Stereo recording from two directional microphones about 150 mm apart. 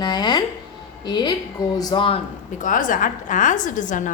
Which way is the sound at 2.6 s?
60° left (ahead or behind).